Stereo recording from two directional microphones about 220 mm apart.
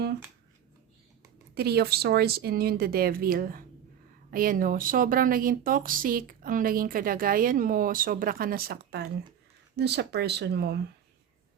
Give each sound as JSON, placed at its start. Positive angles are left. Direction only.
{"t": 1.5, "sound": "speech", "side_deg": -45}